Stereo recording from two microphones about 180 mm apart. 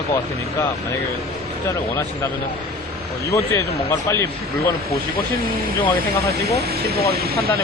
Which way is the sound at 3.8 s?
15° left (ahead or behind).